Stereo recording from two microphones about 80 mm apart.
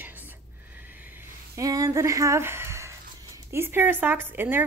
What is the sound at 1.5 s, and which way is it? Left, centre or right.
Speech, right.